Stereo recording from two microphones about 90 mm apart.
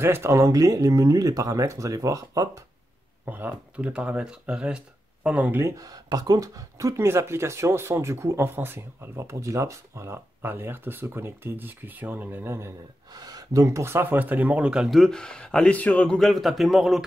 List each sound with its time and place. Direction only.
0.0 s speech: 30° right (ahead or behind)
3.3 s speech: 20° right (ahead or behind)
5.8 s speech: 45° right (ahead or behind); by 12.7 s 30° right (ahead or behind)
13.1 s speech: 45° right (ahead or behind); by 16.2 s 15° left (ahead or behind)
16.2 s a man's voice: centre (ahead or behind)